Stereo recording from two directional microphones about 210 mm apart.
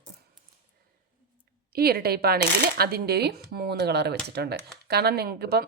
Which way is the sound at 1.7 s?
45° right (ahead or behind).